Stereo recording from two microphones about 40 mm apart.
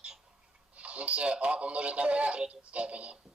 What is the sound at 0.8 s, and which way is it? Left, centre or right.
Speech, right.